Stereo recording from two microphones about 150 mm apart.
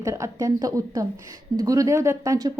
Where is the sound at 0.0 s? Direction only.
20° right (ahead or behind).